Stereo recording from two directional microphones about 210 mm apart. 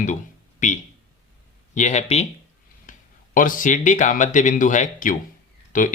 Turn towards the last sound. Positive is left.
turn(degrees=40)  # may be behind; listen again after turning